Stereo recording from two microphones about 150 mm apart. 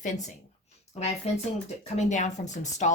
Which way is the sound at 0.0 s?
50° left (ahead or behind).